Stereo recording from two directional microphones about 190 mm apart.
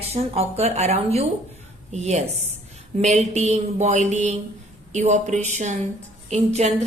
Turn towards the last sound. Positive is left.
turn(degrees=-35)  # may be behind; listen again after turning